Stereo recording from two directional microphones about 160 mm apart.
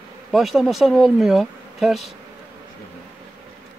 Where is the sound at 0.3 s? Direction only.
Centre (ahead or behind).